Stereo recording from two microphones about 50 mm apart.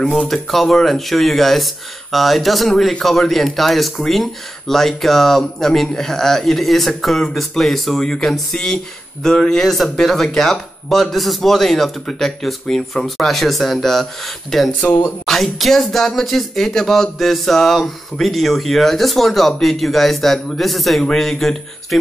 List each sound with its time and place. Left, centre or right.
0.3 s speech: centre